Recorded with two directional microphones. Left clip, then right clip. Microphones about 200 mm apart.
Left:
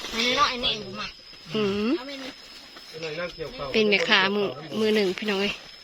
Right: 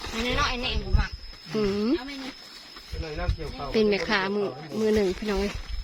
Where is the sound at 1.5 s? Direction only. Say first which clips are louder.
Even; 10° right (ahead or behind).